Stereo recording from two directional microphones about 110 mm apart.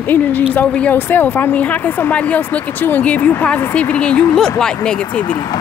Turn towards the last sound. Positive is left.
turn(degrees=10)  # may be behind; listen again after turning